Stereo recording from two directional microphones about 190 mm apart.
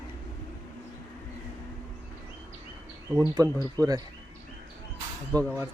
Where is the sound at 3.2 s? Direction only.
20° right (ahead or behind).